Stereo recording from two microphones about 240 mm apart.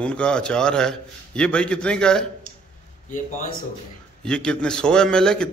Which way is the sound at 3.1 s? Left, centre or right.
Left.